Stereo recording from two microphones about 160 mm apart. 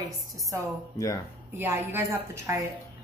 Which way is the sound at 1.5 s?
15° right (ahead or behind).